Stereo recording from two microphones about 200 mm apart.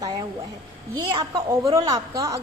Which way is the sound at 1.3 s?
15° right (ahead or behind).